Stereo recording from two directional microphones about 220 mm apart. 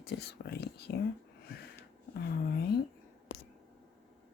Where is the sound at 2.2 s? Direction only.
45° left (ahead or behind).